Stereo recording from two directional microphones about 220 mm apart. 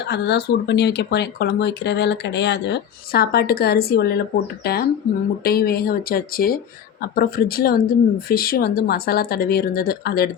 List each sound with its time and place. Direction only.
0.1 s speech: 50° left (ahead or behind)